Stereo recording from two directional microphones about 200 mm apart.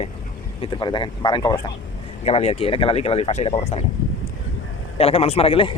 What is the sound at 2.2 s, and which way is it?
Speech, 30° left (ahead or behind).